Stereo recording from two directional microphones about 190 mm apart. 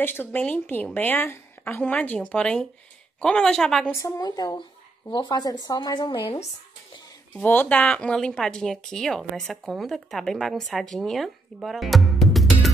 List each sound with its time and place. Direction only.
0.0 s a woman's voice: 10° left (ahead or behind)
4.0 s speech: 20° left (ahead or behind)
7.3 s speech: 10° left (ahead or behind)